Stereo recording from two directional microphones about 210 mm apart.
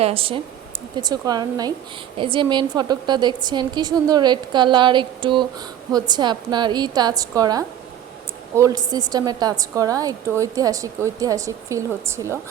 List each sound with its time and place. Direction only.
0.0 s a woman's voice: 25° right (ahead or behind)